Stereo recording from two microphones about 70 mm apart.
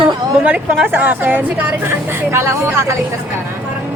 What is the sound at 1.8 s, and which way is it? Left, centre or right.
Speech, right.